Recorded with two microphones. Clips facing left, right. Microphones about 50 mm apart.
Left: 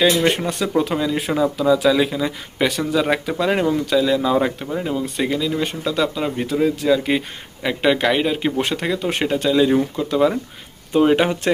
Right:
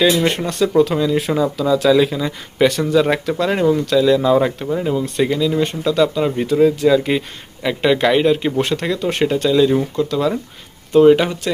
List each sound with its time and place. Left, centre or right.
0.0 s speech: centre
10.1 s speech: centre